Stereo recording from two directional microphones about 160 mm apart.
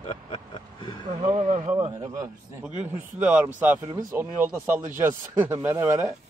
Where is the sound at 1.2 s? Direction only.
40° right (ahead or behind).